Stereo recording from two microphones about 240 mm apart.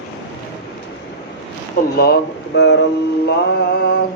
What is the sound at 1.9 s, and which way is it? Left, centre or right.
Speech, left.